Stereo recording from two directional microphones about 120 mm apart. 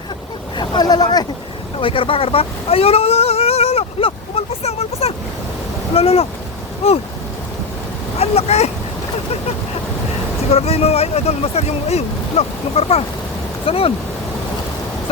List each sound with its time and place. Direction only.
0.5 s a sound: 40° left (ahead or behind)
1.8 s speech: 50° left (ahead or behind)
8.2 s speech: 60° left (ahead or behind)
10.5 s speech: 55° left (ahead or behind)